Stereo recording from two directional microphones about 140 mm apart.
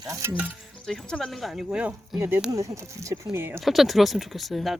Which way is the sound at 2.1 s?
15° right (ahead or behind).